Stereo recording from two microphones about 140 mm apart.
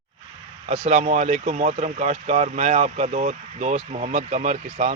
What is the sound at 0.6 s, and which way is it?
Speech, 55° right (ahead or behind).